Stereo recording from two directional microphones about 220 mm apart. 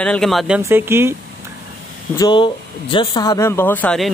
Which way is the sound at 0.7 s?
10° right (ahead or behind).